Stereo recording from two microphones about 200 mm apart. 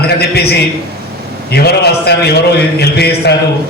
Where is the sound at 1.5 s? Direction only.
55° left (ahead or behind).